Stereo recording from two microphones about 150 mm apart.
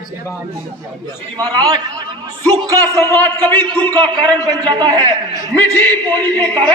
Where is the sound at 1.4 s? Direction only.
25° right (ahead or behind).